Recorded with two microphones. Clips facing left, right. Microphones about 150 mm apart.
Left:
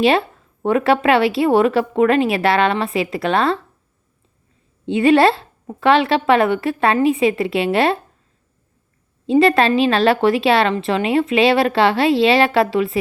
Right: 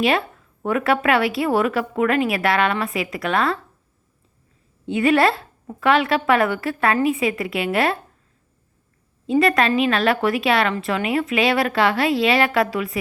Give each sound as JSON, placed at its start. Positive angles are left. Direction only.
{"t": 0.0, "sound": "a woman's voice", "side_deg": 25}
{"t": 4.9, "sound": "a woman's voice", "side_deg": 25}
{"t": 9.2, "sound": "a woman's voice", "side_deg": 25}